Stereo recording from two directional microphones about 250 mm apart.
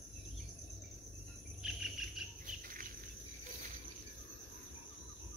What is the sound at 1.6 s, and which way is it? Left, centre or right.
Cricket, centre.